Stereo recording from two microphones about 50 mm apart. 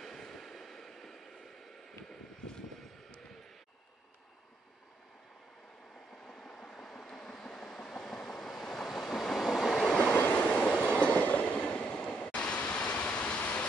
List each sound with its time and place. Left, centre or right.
0.0 s vehicle: centre
6.2 s train: centre
10.1 s train: left
12.7 s vehicle: left